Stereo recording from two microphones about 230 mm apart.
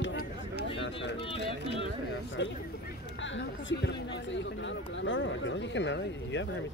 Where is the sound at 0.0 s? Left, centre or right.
Left.